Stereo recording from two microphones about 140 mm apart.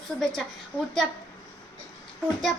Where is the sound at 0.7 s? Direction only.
15° left (ahead or behind).